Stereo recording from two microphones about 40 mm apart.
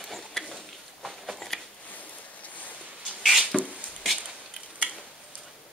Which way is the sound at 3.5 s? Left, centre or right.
Centre.